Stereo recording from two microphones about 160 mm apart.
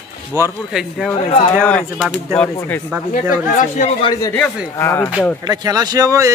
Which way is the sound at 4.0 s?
25° left (ahead or behind).